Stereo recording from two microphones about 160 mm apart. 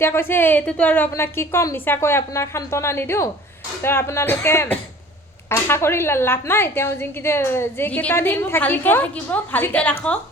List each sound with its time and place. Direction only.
0.0 s speech: 15° left (ahead or behind)